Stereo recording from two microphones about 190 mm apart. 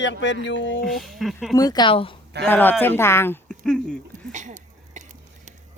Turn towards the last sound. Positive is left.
turn(degrees=-40)  # may be behind; listen again after turning